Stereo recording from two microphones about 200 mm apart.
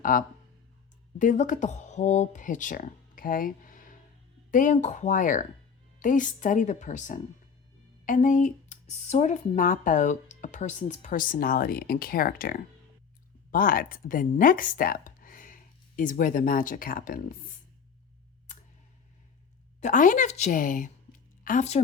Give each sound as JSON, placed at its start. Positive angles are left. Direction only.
{"t": 0.0, "sound": "speech", "side_deg": 45}
{"t": 19.8, "sound": "speech", "side_deg": 40}